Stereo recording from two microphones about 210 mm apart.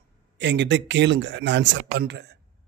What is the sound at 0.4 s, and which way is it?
Speech, 55° right (ahead or behind).